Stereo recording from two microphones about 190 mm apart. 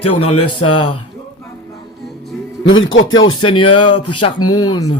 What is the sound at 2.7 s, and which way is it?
Speech, 90° left.